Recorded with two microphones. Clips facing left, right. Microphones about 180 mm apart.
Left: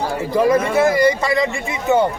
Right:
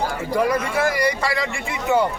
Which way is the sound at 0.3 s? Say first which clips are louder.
Left 6 dB; 25° left (ahead or behind).